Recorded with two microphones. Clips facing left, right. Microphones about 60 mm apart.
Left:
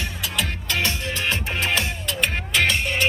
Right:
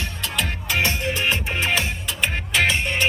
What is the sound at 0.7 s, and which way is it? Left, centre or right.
Music, right.